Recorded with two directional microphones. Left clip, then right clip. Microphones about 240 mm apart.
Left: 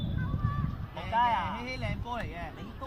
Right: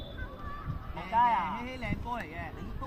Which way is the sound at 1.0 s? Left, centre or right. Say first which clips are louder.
Right 1 dB; left.